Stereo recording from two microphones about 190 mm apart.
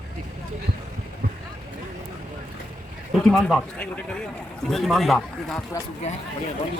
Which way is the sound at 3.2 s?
Centre (ahead or behind).